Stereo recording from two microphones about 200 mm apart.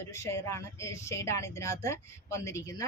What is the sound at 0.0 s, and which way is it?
Speech, 15° left (ahead or behind).